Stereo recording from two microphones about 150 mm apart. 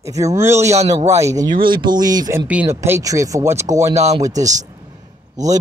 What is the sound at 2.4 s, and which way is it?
Speech, 15° right (ahead or behind).